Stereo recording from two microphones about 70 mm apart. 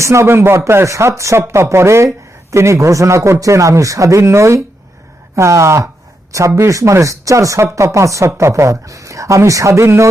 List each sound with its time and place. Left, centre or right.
0.0 s speech: right